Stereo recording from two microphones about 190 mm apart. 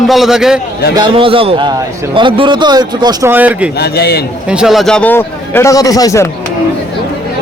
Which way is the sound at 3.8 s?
60° left (ahead or behind).